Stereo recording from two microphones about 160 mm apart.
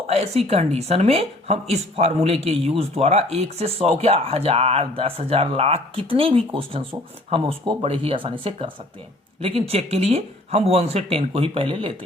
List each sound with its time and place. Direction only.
0.1 s a woman's voice: 40° right (ahead or behind)